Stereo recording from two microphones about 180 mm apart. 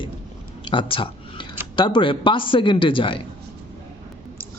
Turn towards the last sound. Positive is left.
turn(degrees=30)  # may be behind; listen again after turning